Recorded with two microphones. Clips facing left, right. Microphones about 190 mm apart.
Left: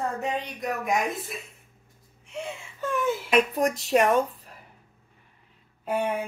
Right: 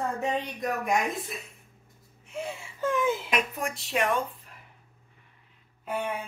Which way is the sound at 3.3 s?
35° left (ahead or behind).